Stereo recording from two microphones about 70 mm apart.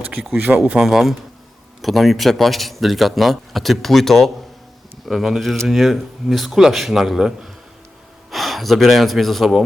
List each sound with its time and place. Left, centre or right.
0.4 s speech: right
0.8 s a man's voice: centre